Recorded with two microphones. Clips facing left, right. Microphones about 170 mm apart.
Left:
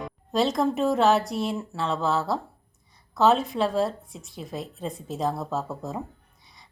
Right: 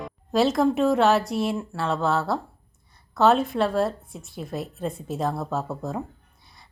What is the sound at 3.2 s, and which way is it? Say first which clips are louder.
Speech: right 1 dB; centre (ahead or behind).